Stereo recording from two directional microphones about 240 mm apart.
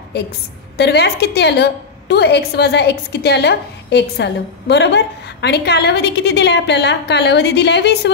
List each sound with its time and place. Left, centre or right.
0.7 s a woman's voice: left